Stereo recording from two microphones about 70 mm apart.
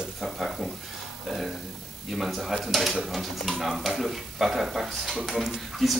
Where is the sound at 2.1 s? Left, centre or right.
Centre.